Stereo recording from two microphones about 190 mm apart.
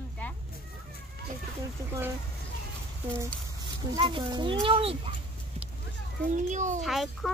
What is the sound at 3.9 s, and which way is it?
A child's voice, 25° right (ahead or behind).